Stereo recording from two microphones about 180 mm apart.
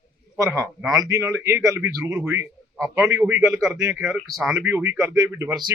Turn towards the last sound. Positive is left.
turn(degrees=-20)  # may be behind; listen again after turning